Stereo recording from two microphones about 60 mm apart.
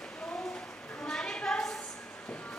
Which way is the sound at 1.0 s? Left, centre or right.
Centre.